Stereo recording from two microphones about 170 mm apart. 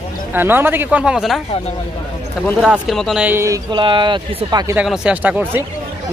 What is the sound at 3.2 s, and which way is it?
Speech, 15° right (ahead or behind).